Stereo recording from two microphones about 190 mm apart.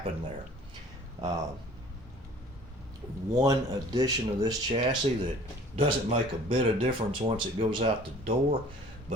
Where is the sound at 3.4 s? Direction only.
20° right (ahead or behind).